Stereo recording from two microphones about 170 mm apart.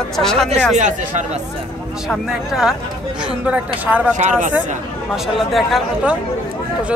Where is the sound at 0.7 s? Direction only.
45° right (ahead or behind).